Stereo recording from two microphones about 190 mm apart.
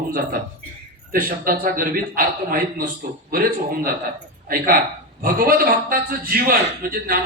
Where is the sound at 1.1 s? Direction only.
50° right (ahead or behind).